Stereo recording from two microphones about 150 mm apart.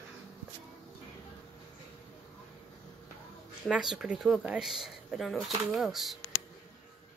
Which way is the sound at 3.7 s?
5° right (ahead or behind).